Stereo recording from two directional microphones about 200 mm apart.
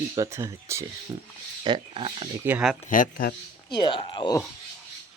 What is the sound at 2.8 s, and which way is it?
Speech, 40° left (ahead or behind).